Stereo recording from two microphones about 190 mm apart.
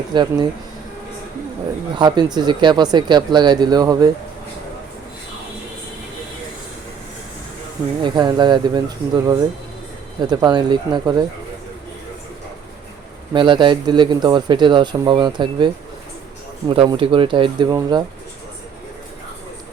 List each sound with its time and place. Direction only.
0.1 s speech: 25° right (ahead or behind)
2.0 s speech: 25° right (ahead or behind)
8.0 s speech: 25° right (ahead or behind)
13.3 s speech: 25° right (ahead or behind)